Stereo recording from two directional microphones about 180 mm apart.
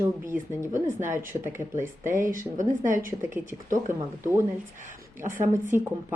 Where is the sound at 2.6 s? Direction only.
45° right (ahead or behind).